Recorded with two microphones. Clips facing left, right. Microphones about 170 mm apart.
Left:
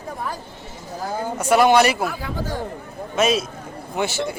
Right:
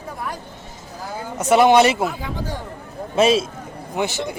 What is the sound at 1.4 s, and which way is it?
A man's voice, 20° right (ahead or behind).